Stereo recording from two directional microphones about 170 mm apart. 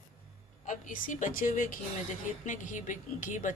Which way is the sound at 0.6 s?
50° left (ahead or behind).